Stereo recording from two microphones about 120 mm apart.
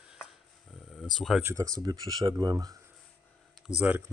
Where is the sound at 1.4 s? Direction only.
25° right (ahead or behind).